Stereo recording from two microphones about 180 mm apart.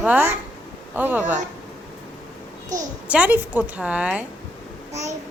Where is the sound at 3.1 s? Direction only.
10° right (ahead or behind).